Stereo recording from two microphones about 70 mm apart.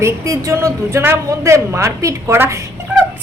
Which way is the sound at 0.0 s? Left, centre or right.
Right.